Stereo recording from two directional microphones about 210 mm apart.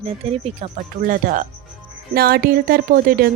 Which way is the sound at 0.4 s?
35° right (ahead or behind).